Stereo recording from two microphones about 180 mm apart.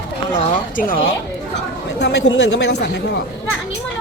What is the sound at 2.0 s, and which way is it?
Speech, 70° left (ahead or behind).